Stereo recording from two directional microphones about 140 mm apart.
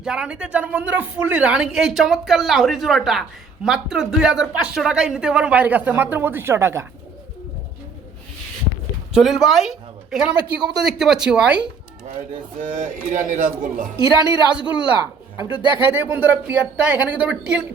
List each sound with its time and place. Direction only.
0.0 s speech: 5° right (ahead or behind)
9.1 s speech: centre (ahead or behind)
12.5 s speech: 75° right (ahead or behind)
14.0 s speech: 25° right (ahead or behind)
15.4 s speech: 35° left (ahead or behind)
15.8 s a woman's voice: 15° right (ahead or behind)